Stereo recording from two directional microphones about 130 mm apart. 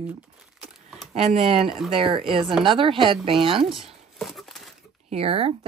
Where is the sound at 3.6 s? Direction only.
Centre (ahead or behind).